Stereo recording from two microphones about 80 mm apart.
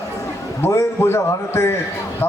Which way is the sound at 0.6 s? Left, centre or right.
Left.